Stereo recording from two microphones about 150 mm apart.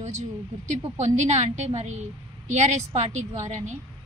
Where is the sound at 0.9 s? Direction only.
50° right (ahead or behind).